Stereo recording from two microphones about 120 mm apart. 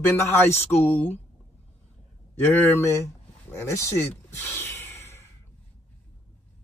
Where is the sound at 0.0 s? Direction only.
20° left (ahead or behind).